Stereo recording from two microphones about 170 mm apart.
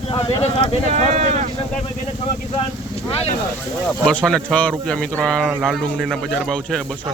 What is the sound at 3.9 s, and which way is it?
Speech, 5° left (ahead or behind).